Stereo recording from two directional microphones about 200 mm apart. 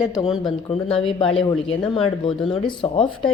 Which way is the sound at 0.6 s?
25° left (ahead or behind).